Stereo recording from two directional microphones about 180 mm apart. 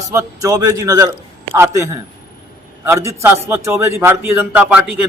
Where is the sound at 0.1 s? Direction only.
15° right (ahead or behind).